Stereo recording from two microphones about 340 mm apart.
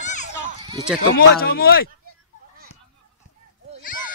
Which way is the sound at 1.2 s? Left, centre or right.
Left.